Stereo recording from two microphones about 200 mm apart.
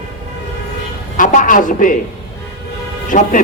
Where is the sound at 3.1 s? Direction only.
40° left (ahead or behind).